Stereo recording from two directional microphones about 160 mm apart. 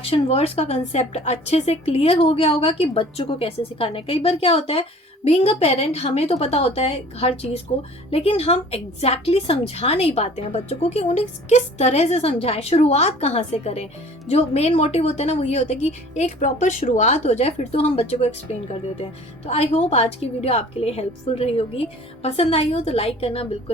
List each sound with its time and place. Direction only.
0.0 s a woman's voice: 35° left (ahead or behind)